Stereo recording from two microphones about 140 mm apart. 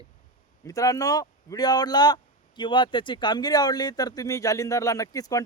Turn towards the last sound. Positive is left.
turn(degrees=25)  # may be behind; listen again after turning